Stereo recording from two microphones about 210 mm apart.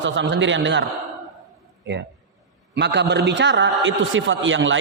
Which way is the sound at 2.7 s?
55° right (ahead or behind).